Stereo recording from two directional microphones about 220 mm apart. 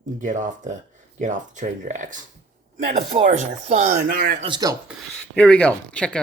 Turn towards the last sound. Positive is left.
turn(degrees=5)  # may be behind; listen again after turning